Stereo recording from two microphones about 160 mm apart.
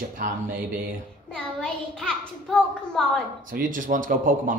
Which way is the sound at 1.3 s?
5° left (ahead or behind).